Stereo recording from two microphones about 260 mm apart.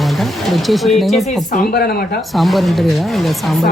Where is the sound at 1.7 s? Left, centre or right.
Left.